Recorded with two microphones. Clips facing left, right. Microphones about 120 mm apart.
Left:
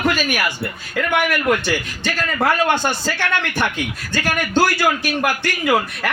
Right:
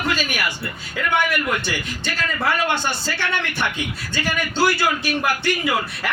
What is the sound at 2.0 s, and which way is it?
A man's voice, 50° left (ahead or behind).